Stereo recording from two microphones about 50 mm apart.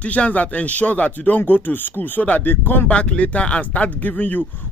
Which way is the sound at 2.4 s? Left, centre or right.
Left.